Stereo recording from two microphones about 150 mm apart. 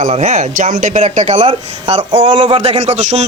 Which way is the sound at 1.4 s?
40° right (ahead or behind).